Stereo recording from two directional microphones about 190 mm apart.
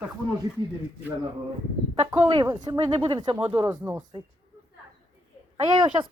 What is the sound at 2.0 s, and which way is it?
Speech, 30° right (ahead or behind).